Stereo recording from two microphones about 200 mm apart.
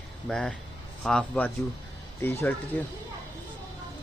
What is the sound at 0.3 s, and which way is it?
Speech, 5° left (ahead or behind).